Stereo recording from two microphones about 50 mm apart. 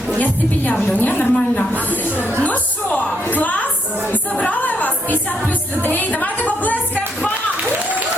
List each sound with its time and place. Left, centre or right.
0.2 s a woman's voice: left
2.4 s music: left